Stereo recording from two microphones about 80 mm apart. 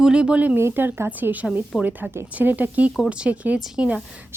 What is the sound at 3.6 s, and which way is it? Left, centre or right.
Speech, centre.